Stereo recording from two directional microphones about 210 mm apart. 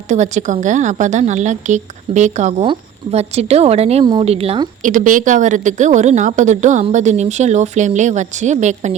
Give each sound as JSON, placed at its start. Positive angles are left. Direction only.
{"t": 0.1, "sound": "a woman's voice", "side_deg": -35}
{"t": 4.8, "sound": "a woman's voice", "side_deg": -40}